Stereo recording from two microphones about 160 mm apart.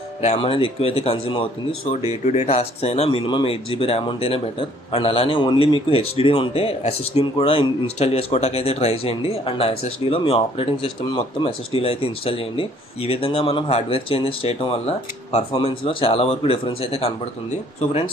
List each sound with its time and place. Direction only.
0.2 s speech: 40° left (ahead or behind)